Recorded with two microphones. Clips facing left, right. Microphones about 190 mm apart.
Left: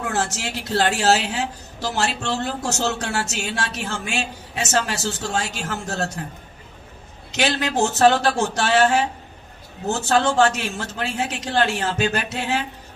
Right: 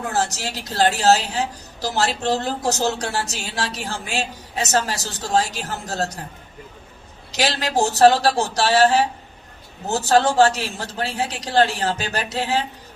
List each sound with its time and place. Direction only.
0.1 s a woman's voice: 35° right (ahead or behind)
7.3 s a woman's voice: 35° right (ahead or behind)